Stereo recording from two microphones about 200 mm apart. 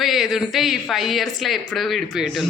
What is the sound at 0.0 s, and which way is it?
A woman's voice, centre (ahead or behind).